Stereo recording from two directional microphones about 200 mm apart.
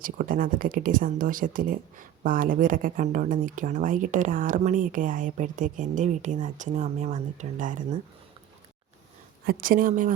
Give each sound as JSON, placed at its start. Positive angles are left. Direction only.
{"t": 0.0, "sound": "speech", "side_deg": -45}
{"t": 9.5, "sound": "speech", "side_deg": -45}